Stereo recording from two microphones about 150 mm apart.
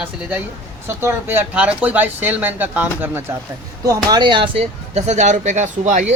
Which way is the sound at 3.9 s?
25° right (ahead or behind).